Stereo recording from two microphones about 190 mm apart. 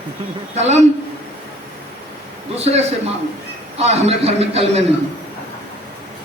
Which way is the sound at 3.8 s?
35° right (ahead or behind).